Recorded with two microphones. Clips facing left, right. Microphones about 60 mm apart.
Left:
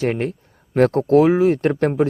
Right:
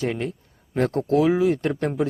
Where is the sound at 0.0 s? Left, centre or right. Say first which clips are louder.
Left 5 dB; left.